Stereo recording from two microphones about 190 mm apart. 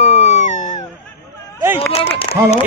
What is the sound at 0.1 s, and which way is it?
Cat, 40° left (ahead or behind).